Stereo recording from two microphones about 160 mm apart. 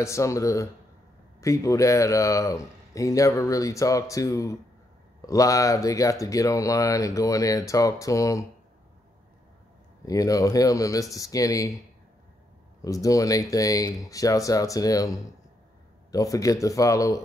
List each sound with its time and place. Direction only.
0.0 s speech: 20° left (ahead or behind)
10.0 s speech: 20° left (ahead or behind)
12.8 s speech: 20° left (ahead or behind)